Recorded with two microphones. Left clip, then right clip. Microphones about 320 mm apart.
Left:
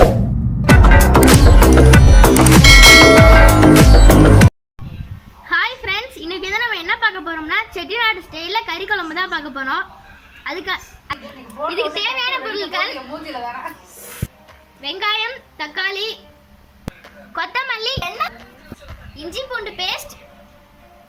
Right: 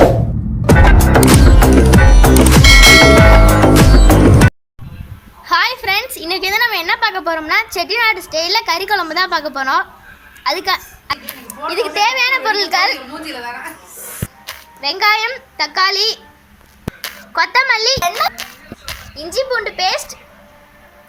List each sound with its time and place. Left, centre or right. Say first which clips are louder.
0.6 s music: right 1 dB; centre
5.5 s a sound: right 4 dB; centre
10.4 s a woman's voice: right 7 dB; centre
14.8 s a woman's voice: right 6 dB; centre
16.9 s clapping: right 5 dB; centre
17.3 s a woman's voice: right 9 dB; centre